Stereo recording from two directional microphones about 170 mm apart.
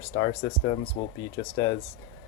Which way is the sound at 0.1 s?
20° left (ahead or behind).